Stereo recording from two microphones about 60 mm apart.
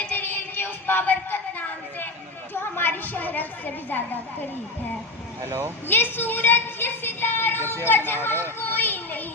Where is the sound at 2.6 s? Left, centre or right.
Left.